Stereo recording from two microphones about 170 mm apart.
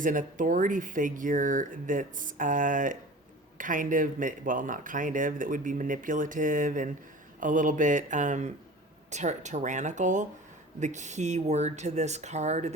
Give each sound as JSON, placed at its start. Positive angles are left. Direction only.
{"t": 0.0, "sound": "speech", "side_deg": -50}